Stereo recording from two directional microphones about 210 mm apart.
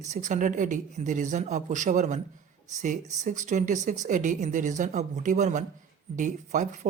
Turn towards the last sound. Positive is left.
turn(degrees=-35)  # may be behind; listen again after turning